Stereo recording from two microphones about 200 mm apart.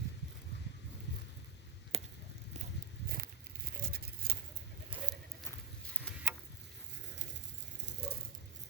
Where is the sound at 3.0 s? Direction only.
45° right (ahead or behind).